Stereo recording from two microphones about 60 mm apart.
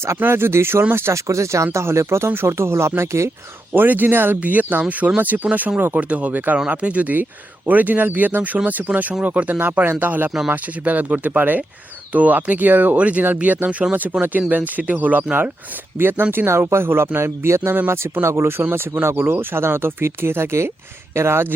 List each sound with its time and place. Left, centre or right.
0.2 s speech: right
1.1 s speech: right
3.8 s speech: right
16.0 s speech: right